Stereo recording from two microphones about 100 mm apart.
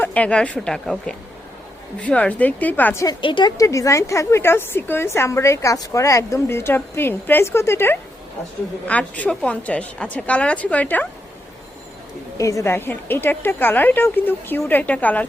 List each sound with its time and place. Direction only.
0.0 s a woman's voice: 15° left (ahead or behind)
3.2 s a woman's voice: 55° left (ahead or behind)
3.6 s a woman's voice: 35° left (ahead or behind)
8.9 s a woman's voice: 15° left (ahead or behind)
12.4 s a woman's voice: 30° left (ahead or behind); by 15.3 s 15° left (ahead or behind)